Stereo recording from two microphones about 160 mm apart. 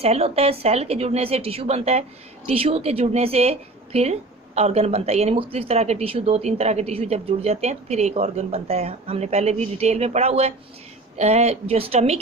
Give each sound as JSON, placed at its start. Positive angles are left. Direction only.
{"t": 0.0, "sound": "a woman's voice", "side_deg": -40}